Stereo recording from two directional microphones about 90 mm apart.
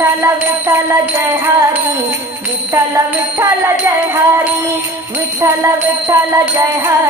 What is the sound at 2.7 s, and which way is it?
Music, 40° right (ahead or behind).